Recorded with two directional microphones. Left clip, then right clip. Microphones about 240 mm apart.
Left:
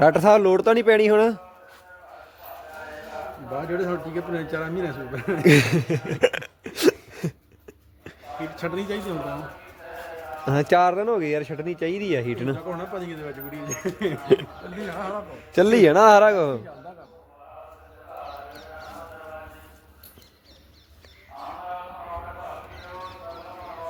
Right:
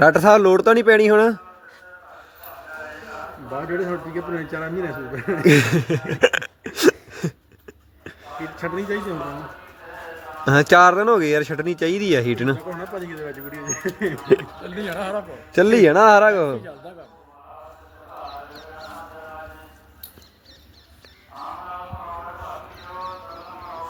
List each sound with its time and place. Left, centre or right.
0.0 s speech: centre
3.8 s a man's voice: centre
5.4 s a sound: centre
8.5 s speech: centre
10.4 s speech: centre
12.5 s speech: centre
14.8 s speech: right
15.5 s a man's voice: centre